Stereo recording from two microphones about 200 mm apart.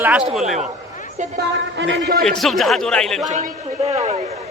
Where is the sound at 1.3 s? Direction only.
60° right (ahead or behind).